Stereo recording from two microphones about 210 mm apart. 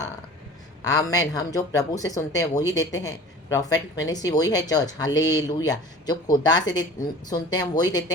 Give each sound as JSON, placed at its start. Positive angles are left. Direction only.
{"t": 0.9, "sound": "speech", "side_deg": 15}